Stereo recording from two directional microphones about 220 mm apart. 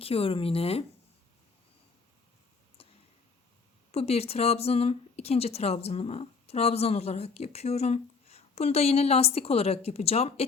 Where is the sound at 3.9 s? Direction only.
30° left (ahead or behind).